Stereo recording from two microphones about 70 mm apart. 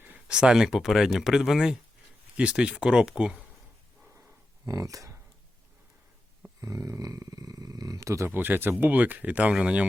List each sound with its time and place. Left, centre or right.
0.3 s speech: centre
4.6 s speech: right
6.6 s speech: right
8.3 s speech: right; by 9.8 s centre